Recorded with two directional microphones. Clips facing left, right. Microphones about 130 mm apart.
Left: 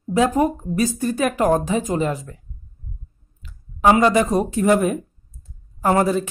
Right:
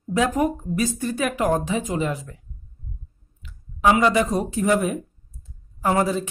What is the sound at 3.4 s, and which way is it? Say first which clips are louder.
Speech: left 3 dB; 40° left (ahead or behind).